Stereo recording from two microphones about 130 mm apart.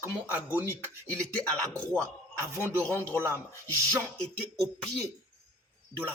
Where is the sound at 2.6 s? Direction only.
20° right (ahead or behind).